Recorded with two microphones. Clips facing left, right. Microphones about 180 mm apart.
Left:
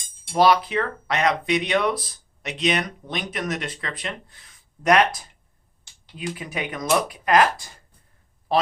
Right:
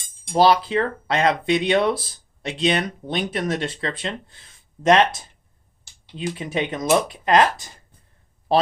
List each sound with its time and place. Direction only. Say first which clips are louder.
0.3 s speech: right 2 dB; 30° right (ahead or behind)
6.3 s speech: right 8 dB; 25° right (ahead or behind)